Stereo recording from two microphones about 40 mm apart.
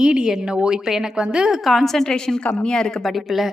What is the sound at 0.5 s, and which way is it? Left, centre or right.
Speech, right.